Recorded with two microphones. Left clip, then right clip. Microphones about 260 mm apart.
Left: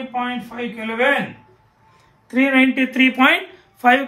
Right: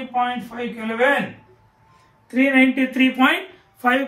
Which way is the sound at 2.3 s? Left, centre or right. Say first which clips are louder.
Left 1 dB; centre.